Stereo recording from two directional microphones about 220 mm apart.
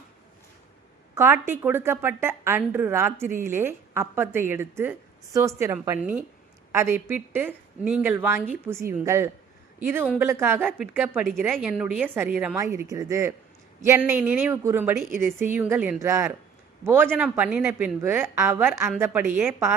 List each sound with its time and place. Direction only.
1.1 s a woman's voice: 10° right (ahead or behind)